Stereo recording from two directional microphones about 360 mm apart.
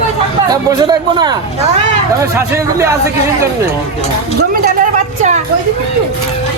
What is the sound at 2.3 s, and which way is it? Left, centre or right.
Speech, centre.